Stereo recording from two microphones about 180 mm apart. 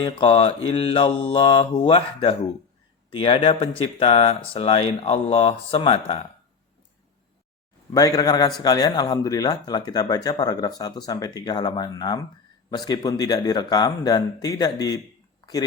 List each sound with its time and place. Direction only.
0.0 s speech: 30° left (ahead or behind)
7.9 s speech: 20° left (ahead or behind)